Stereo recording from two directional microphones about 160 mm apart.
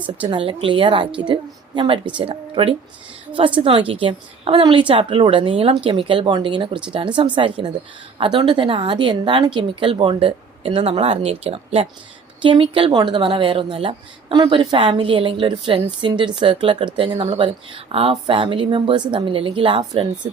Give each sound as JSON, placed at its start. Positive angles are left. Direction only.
{"t": 0.2, "sound": "speech", "side_deg": -30}